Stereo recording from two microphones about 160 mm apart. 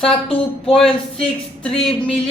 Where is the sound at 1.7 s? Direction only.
35° left (ahead or behind).